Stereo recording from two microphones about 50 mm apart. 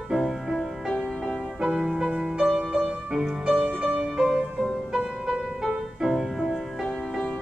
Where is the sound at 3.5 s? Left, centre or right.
Right.